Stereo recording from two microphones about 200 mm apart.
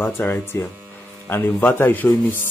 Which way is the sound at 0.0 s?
10° left (ahead or behind).